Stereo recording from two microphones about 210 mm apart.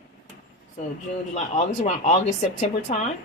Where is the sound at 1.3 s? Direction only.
30° left (ahead or behind).